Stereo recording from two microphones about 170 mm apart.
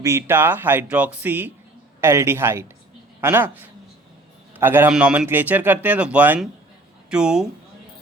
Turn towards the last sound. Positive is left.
turn(degrees=-5)  # may be behind; listen again after turning